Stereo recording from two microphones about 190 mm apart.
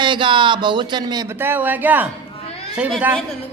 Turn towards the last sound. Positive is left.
turn(degrees=-5)  # may be behind; listen again after turning